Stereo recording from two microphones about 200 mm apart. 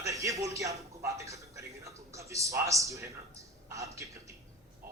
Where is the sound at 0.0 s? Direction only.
15° right (ahead or behind).